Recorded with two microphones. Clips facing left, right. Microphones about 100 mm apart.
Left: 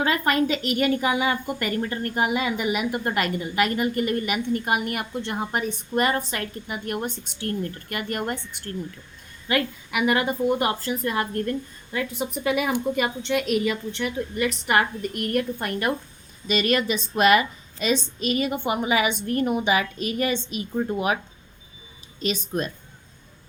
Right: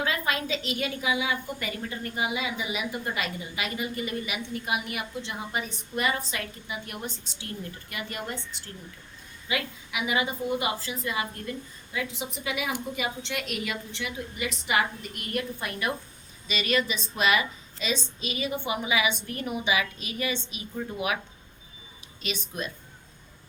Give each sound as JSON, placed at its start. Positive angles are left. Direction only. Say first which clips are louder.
{"t": 0.0, "sound": "a woman's voice", "louder": "left 7 dB", "side_deg": 55}
{"t": 22.2, "sound": "speech", "louder": "left 7 dB", "side_deg": 40}